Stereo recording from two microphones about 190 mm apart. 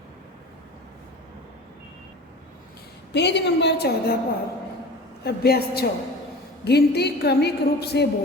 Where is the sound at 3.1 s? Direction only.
65° left (ahead or behind).